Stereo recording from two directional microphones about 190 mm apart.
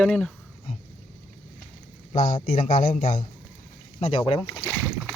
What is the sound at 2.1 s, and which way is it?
A man's voice, 45° left (ahead or behind).